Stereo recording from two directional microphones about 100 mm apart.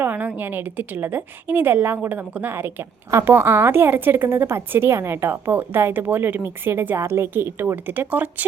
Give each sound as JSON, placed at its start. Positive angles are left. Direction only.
{"t": 0.0, "sound": "a woman's voice", "side_deg": -15}